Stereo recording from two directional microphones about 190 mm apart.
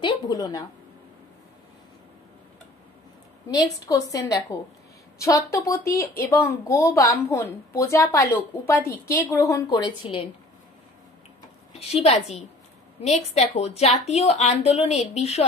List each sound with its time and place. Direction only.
0.0 s a woman's voice: 25° left (ahead or behind)
3.4 s a woman's voice: 20° left (ahead or behind)
11.8 s a woman's voice: 35° left (ahead or behind)